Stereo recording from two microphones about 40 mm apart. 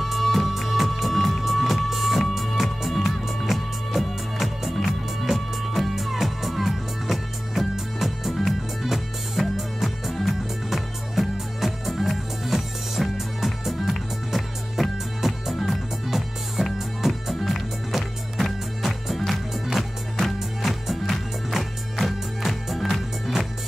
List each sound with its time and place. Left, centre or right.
0.0 s music: centre